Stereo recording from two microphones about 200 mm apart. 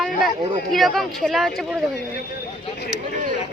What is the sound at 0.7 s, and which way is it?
A woman's voice, centre (ahead or behind).